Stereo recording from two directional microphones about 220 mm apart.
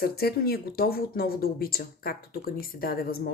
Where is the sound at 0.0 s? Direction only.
45° left (ahead or behind).